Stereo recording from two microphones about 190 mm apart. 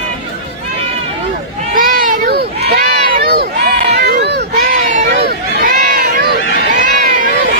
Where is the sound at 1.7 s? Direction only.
45° right (ahead or behind).